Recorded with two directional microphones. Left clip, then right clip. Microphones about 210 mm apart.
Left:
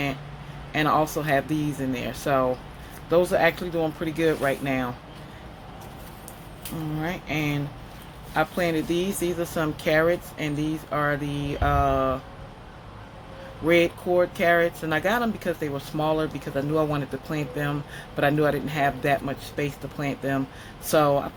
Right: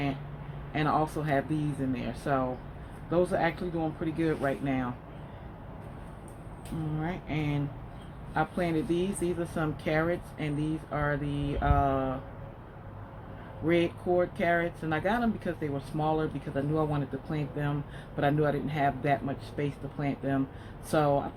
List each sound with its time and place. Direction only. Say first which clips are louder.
0.7 s speech: left 6 dB; 35° left (ahead or behind)
7.0 s speech: left 7 dB; 35° left (ahead or behind)
13.7 s speech: left 7 dB; 35° left (ahead or behind)